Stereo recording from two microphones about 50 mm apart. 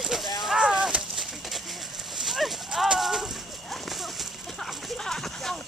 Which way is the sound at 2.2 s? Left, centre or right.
Centre.